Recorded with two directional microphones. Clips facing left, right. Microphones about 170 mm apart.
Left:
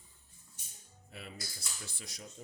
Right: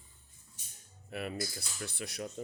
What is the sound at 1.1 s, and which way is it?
Speech, 65° right (ahead or behind).